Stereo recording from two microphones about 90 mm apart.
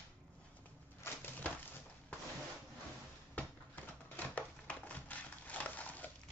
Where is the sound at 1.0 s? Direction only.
20° left (ahead or behind).